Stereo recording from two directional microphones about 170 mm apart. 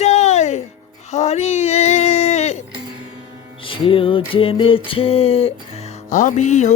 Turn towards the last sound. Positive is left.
turn(degrees=45)  # may be behind; listen again after turning